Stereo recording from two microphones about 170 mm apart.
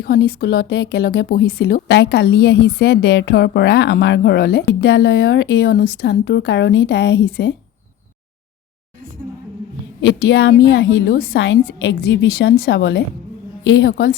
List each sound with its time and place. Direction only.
0.0 s speech: 65° left (ahead or behind); by 7.5 s 80° left
10.0 s speech: 85° left; by 14.2 s 65° left (ahead or behind)